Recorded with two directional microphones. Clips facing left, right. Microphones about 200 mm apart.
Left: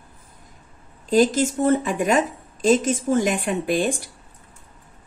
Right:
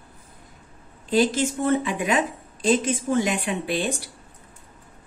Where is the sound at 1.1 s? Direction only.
45° left (ahead or behind).